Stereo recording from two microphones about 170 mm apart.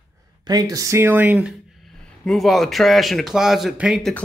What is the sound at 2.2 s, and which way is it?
Speech, centre (ahead or behind).